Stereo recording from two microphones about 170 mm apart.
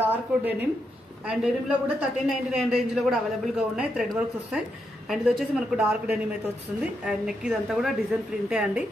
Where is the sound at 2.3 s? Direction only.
Centre (ahead or behind).